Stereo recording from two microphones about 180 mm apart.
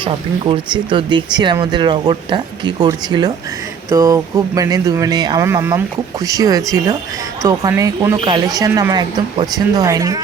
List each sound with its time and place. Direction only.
0.0 s speech: 25° right (ahead or behind)